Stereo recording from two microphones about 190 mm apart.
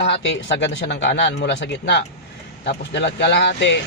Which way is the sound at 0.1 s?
70° left (ahead or behind).